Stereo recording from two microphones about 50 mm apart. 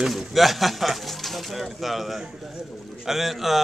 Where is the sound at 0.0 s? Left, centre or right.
Centre.